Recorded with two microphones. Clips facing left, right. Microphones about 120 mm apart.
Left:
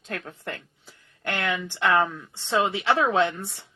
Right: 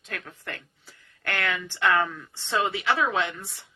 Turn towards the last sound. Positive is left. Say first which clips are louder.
# left 4 dB
turn(degrees=35)  # may be behind; listen again after turning